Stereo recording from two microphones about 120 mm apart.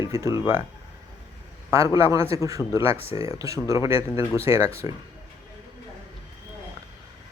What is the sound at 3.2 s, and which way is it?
Speech, 25° right (ahead or behind).